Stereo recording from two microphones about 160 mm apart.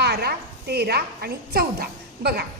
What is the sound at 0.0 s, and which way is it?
A woman's voice, 85° right.